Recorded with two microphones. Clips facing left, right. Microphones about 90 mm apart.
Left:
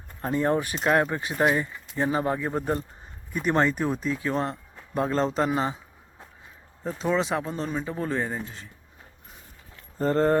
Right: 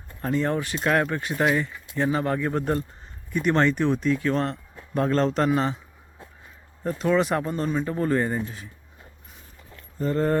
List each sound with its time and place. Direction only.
0.2 s speech: 20° left (ahead or behind)
6.8 s speech: centre (ahead or behind)
10.0 s speech: 40° left (ahead or behind)